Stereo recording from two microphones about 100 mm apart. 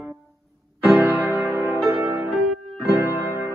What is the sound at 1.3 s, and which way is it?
Music, 15° right (ahead or behind).